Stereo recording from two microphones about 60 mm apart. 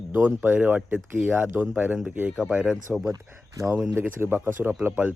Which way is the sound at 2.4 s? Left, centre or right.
Centre.